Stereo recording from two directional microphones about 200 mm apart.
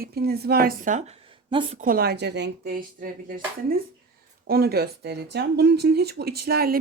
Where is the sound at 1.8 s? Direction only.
45° right (ahead or behind).